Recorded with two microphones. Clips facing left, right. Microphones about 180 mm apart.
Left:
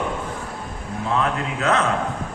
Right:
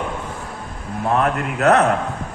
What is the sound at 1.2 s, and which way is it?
Speech, 65° right (ahead or behind).